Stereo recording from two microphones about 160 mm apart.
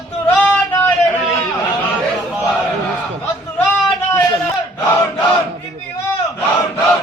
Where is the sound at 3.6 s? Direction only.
5° left (ahead or behind).